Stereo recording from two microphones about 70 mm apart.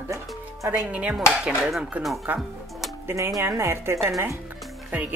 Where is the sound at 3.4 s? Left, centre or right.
Right.